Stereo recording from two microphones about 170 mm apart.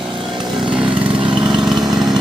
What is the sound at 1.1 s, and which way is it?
Lawn mower, 30° right (ahead or behind).